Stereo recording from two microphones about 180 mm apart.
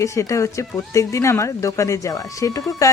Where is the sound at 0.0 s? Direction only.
15° left (ahead or behind).